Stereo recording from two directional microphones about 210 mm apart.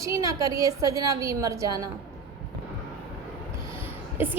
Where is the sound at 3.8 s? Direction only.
10° right (ahead or behind).